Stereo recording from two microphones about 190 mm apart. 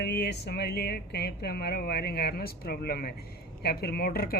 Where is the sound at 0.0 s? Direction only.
60° left (ahead or behind).